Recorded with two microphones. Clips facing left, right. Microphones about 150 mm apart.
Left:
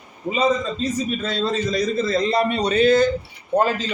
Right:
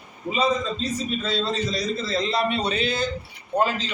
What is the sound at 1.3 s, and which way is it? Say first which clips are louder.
A man's voice: left 2 dB; 50° left (ahead or behind).